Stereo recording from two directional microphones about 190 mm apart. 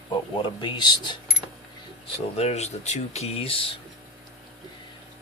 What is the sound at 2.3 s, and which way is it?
Speech, 35° left (ahead or behind).